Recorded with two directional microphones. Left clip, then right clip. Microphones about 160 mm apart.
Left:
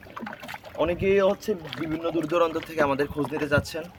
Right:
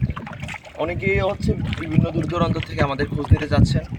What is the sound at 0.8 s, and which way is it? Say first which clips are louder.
Speech: even; 15° left (ahead or behind).